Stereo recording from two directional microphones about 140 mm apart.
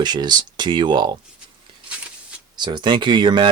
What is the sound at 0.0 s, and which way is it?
Speech, 30° right (ahead or behind).